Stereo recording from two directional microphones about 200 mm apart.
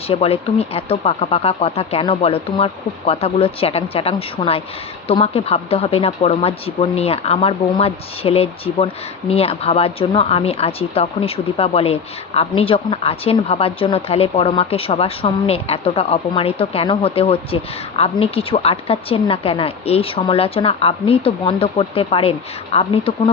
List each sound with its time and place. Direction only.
0.1 s a woman's voice: 30° left (ahead or behind)